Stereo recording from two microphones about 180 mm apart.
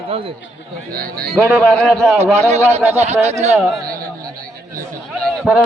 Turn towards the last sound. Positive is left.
turn(degrees=0)  # may be behind; listen again after turning